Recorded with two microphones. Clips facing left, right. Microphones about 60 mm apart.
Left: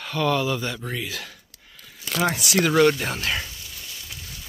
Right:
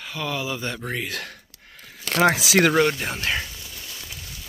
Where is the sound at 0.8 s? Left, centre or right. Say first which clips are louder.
Right 2 dB; right.